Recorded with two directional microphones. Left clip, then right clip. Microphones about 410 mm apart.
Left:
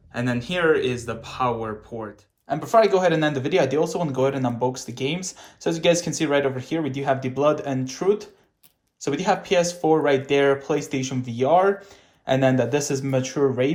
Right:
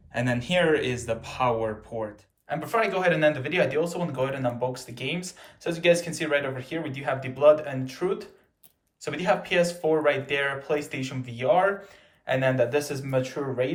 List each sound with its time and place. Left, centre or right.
0.1 s speech: centre